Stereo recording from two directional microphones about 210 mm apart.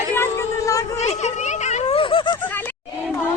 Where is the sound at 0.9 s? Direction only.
30° left (ahead or behind).